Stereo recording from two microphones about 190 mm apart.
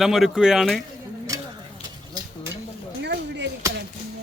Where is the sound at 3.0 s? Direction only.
65° right (ahead or behind).